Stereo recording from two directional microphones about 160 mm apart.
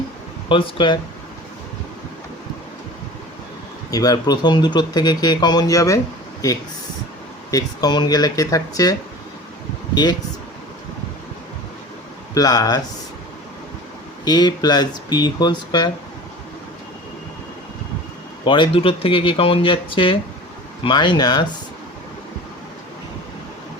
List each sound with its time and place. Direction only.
0.4 s speech: 30° left (ahead or behind)
3.9 s speech: 25° left (ahead or behind)
12.3 s speech: 25° left (ahead or behind)
14.3 s speech: 25° left (ahead or behind)
18.4 s speech: 30° left (ahead or behind)